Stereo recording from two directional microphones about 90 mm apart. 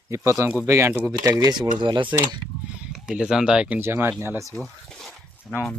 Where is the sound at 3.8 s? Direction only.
25° right (ahead or behind).